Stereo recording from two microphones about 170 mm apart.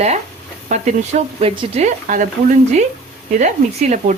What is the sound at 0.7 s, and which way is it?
A woman's voice, 45° right (ahead or behind).